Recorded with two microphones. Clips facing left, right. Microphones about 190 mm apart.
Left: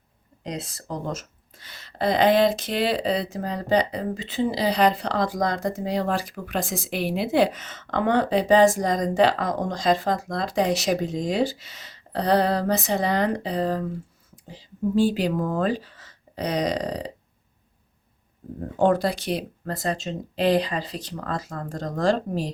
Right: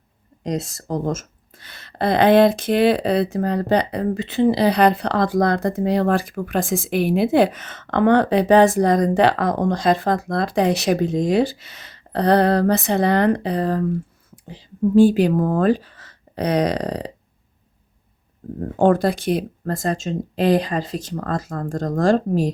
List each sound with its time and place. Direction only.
0.4 s speech: 45° right (ahead or behind); by 17.1 s 60° right (ahead or behind)
18.8 s speech: 50° right (ahead or behind)